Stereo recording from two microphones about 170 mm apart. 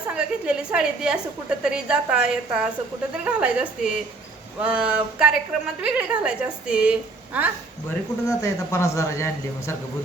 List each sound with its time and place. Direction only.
0.1 s a woman's voice: 5° right (ahead or behind)
8.4 s a man's voice: 15° left (ahead or behind)